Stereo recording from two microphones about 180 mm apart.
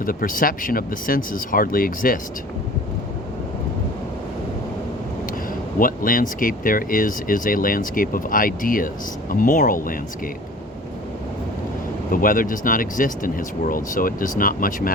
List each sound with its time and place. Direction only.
0.0 s speech: 50° left (ahead or behind)
5.8 s speech: 50° left (ahead or behind)
12.1 s speech: 50° left (ahead or behind)